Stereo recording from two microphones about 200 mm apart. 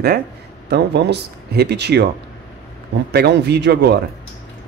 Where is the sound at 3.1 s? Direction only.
55° right (ahead or behind).